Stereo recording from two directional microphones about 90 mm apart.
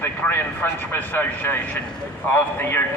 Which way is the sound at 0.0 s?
20° left (ahead or behind).